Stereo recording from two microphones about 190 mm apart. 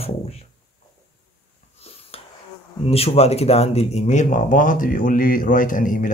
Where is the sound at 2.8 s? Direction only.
30° left (ahead or behind).